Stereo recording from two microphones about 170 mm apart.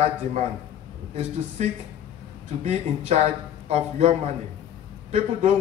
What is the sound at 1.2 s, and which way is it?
Speech, 40° right (ahead or behind).